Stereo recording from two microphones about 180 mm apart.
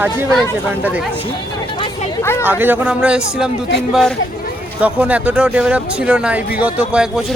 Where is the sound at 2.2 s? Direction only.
15° left (ahead or behind).